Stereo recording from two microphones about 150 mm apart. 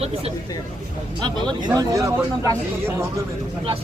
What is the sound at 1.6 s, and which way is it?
Speech, 25° right (ahead or behind).